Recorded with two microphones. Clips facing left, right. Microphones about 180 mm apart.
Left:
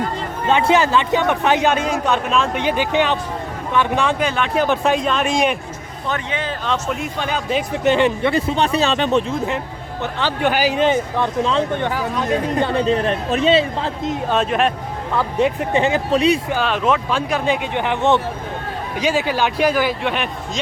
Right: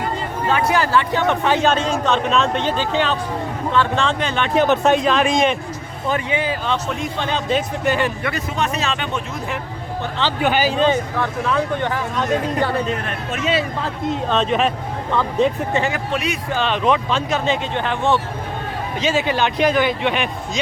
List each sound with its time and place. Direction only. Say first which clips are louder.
0.4 s a man's voice: left 3 dB; 20° left (ahead or behind); by 5.5 s 5° left (ahead or behind)
6.1 s speech: right 3 dB; 10° right (ahead or behind)
7.0 s a man's voice: even; 10° left (ahead or behind)
7.9 s speech: left 7 dB; 25° left (ahead or behind)
10.6 s a man's voice: left 1 dB; 15° left (ahead or behind)
14.1 s speech: right 1 dB; 10° left (ahead or behind)
15.4 s speech: left 2 dB; 20° left (ahead or behind)
16.1 s speech: left 11 dB; 30° left (ahead or behind)
16.5 s a man's voice: even; 5° left (ahead or behind)